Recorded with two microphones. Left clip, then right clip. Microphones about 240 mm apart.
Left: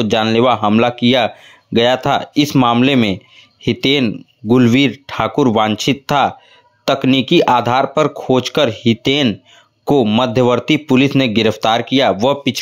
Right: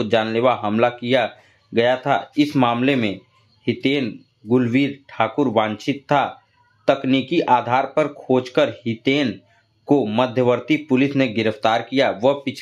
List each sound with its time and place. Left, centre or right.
0.0 s speech: left